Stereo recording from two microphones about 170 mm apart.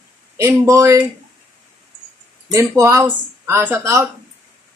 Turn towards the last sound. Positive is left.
turn(degrees=-15)  # may be behind; listen again after turning